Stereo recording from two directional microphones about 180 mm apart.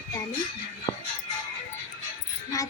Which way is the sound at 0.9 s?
25° left (ahead or behind).